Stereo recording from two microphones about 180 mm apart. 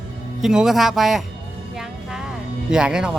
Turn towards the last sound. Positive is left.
turn(degrees=-5)  # may be behind; listen again after turning